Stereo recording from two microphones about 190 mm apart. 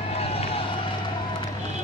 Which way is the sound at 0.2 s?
30° left (ahead or behind).